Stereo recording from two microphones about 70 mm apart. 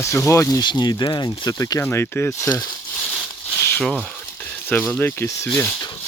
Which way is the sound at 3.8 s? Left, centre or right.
Centre.